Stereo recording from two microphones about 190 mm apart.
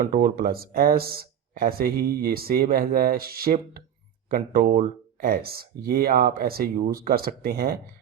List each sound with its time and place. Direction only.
0.0 s speech: 45° right (ahead or behind)